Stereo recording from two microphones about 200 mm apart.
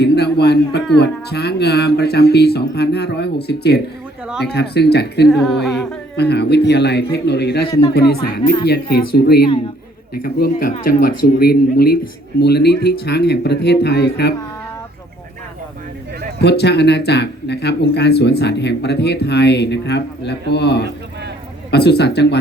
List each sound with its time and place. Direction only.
0.0 s a sound: 55° left (ahead or behind)
0.9 s speech: 55° left (ahead or behind)
5.3 s speech: centre (ahead or behind)
6.1 s speech: 55° left (ahead or behind)
7.7 s speech: 20° left (ahead or behind)
7.9 s speech: 50° left (ahead or behind)
16.4 s speech: 55° left (ahead or behind)